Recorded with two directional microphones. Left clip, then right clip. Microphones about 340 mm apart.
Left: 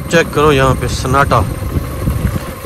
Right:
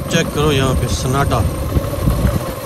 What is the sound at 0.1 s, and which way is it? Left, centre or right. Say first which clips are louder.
Speech: left 6 dB; centre.